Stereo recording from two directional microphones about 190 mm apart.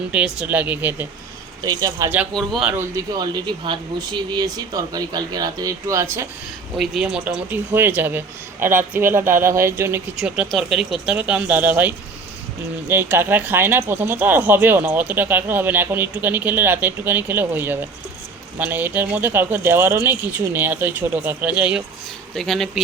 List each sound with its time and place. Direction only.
0.1 s speech: 5° right (ahead or behind)
2.3 s speech: centre (ahead or behind); by 6.2 s 15° right (ahead or behind)
6.7 s speech: centre (ahead or behind)